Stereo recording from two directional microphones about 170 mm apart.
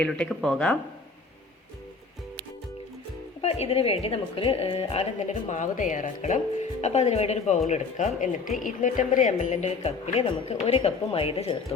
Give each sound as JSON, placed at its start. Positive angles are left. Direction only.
{"t": 0.0, "sound": "speech", "side_deg": 5}
{"t": 3.4, "sound": "a woman's voice", "side_deg": 35}